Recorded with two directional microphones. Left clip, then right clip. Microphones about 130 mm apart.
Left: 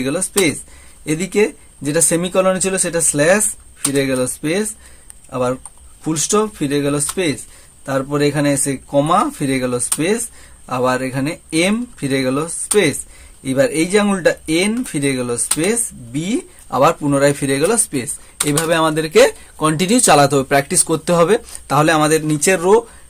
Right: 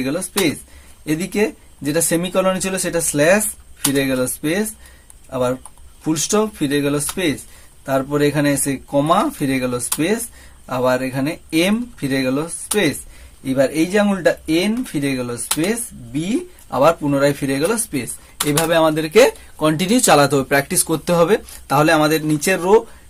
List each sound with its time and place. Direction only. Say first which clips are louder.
0.0 s speech: left 3 dB; 35° left (ahead or behind)